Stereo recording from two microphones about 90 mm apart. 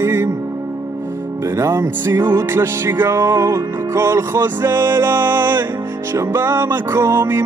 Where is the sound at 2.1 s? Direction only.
45° right (ahead or behind).